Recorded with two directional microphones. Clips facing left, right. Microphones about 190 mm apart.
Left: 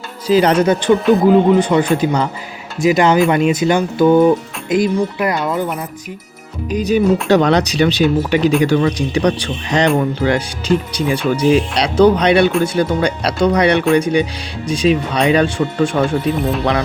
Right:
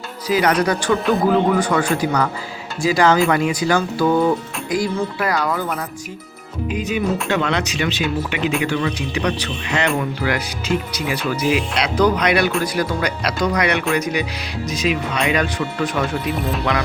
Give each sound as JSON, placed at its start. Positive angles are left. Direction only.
{"t": 0.3, "sound": "speech", "side_deg": 30}
{"t": 0.9, "sound": "speech", "side_deg": 0}
{"t": 1.3, "sound": "speech", "side_deg": 20}
{"t": 6.7, "sound": "speech", "side_deg": 35}